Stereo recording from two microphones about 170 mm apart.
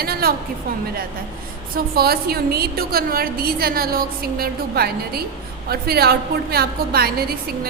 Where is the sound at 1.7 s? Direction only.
65° right (ahead or behind).